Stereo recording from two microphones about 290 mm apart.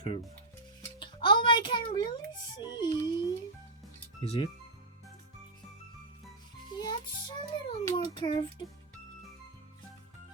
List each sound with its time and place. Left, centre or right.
0.8 s music: centre
4.2 s speech: centre
6.7 s music: centre